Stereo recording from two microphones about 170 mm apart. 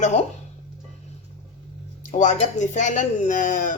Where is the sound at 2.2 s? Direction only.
45° left (ahead or behind).